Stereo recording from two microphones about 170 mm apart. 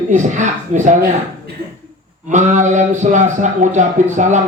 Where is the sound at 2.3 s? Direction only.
45° right (ahead or behind).